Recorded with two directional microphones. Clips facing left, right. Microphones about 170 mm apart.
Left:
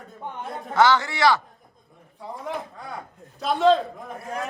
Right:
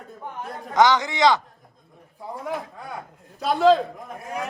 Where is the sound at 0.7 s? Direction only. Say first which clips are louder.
Right 1 dB; 15° right (ahead or behind).